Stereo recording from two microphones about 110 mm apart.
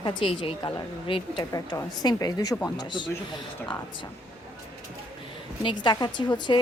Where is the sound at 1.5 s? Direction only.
35° left (ahead or behind).